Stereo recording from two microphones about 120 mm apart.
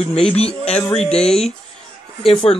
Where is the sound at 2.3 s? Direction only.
55° left (ahead or behind).